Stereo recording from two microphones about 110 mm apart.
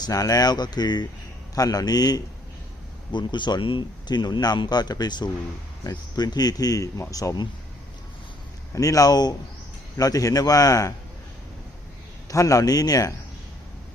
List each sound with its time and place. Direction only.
0.0 s speech: 35° left (ahead or behind)
8.7 s speech: 30° left (ahead or behind)
12.3 s speech: 30° left (ahead or behind)